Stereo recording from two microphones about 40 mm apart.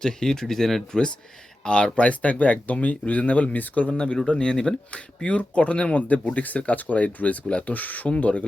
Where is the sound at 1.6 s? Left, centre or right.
Left.